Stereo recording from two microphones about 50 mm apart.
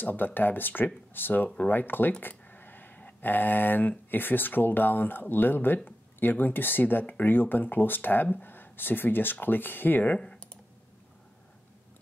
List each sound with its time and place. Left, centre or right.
0.0 s speech: left
2.2 s a sound: left
4.1 s speech: left
10.1 s computer keyboard: centre